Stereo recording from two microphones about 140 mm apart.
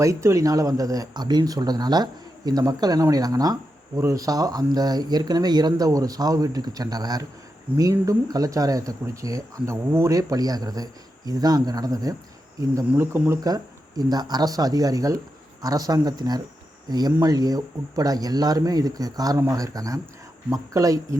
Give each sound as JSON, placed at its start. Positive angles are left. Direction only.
{"t": 0.0, "sound": "speech", "side_deg": -20}
{"t": 12.9, "sound": "speech", "side_deg": -15}
{"t": 13.4, "sound": "speech", "side_deg": -25}